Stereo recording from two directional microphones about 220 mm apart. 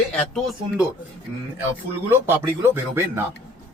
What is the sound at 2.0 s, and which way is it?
Speech, 10° right (ahead or behind).